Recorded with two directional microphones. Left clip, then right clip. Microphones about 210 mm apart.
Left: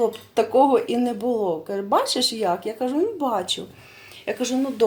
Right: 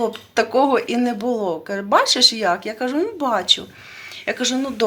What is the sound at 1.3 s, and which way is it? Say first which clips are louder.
Speech: left 1 dB; 30° right (ahead or behind).